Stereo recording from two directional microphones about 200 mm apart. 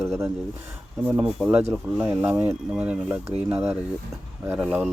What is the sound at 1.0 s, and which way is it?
Speech, 5° right (ahead or behind).